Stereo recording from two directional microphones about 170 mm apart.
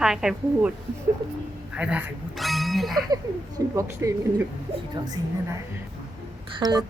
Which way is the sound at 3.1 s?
20° right (ahead or behind).